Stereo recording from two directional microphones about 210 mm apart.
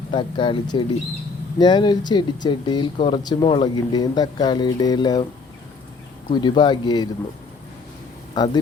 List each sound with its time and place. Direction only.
0.1 s speech: 20° left (ahead or behind)
6.3 s speech: 20° left (ahead or behind)
8.4 s speech: 20° left (ahead or behind)